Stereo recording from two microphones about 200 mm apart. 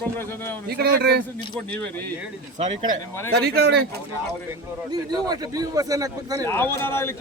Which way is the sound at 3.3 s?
55° right (ahead or behind).